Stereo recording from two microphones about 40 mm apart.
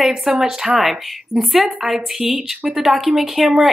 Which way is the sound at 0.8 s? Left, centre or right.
Centre.